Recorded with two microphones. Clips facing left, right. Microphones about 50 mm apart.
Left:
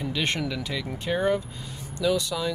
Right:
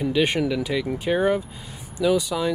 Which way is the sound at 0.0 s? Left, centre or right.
Centre.